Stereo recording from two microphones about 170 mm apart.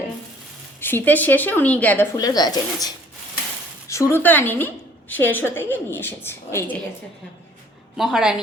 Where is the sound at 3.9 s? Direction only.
15° left (ahead or behind).